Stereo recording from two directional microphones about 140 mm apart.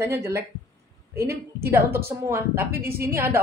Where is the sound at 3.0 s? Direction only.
15° right (ahead or behind).